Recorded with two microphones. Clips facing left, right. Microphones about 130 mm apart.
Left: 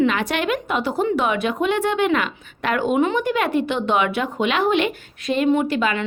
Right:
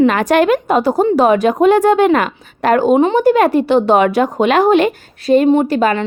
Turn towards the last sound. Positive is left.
turn(degrees=-40)  # may be behind; listen again after turning